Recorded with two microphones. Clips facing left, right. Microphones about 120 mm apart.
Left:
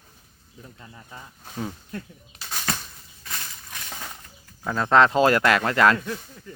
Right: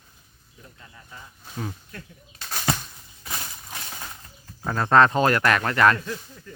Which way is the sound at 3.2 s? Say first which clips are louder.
Right 2 dB; 25° right (ahead or behind).